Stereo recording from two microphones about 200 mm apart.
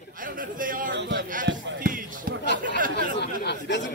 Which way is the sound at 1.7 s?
45° right (ahead or behind).